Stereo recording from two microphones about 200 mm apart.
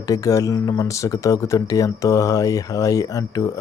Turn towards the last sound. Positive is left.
turn(degrees=15)  # may be behind; listen again after turning